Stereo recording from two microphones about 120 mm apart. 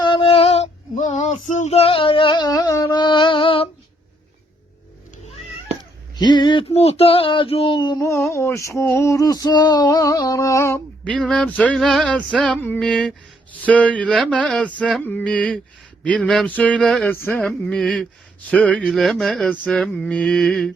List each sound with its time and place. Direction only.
0.0 s female singing: 45° left (ahead or behind)
6.1 s a sound: 35° left (ahead or behind)
6.7 s speech: 60° left (ahead or behind); by 8.0 s 35° left (ahead or behind)
8.0 s a sound: 20° left (ahead or behind)
11.0 s male singing: 10° left (ahead or behind)
18.5 s mantra: 10° left (ahead or behind)